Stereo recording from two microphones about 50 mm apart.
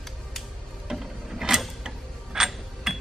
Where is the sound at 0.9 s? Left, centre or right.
Centre.